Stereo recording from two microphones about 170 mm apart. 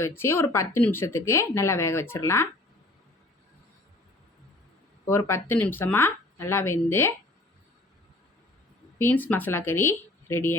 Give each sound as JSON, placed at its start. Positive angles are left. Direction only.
{"t": 0.2, "sound": "speech", "side_deg": 15}
{"t": 5.0, "sound": "speech", "side_deg": 15}
{"t": 9.0, "sound": "speech", "side_deg": 10}